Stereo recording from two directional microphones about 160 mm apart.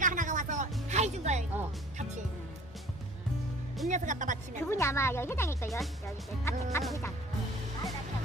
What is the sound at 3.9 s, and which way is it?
Speech, 50° right (ahead or behind).